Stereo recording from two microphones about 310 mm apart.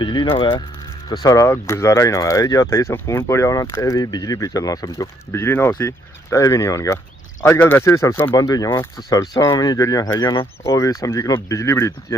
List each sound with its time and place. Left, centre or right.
0.0 s speech: centre